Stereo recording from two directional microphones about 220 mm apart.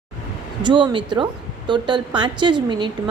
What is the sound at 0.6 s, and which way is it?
Speech, 20° right (ahead or behind).